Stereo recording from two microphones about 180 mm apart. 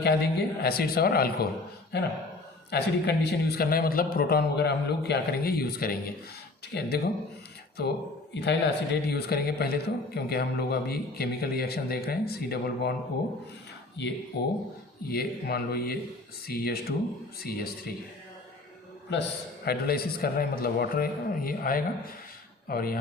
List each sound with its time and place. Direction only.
0.0 s a man's voice: 65° left (ahead or behind)
2.6 s a man's voice: 65° left (ahead or behind)
14.3 s a man's voice: 60° left (ahead or behind)
19.1 s a man's voice: 70° left (ahead or behind)
19.6 s a man's voice: 60° left (ahead or behind)